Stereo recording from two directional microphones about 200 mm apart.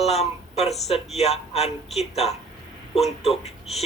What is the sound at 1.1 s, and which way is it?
Speech, 30° left (ahead or behind).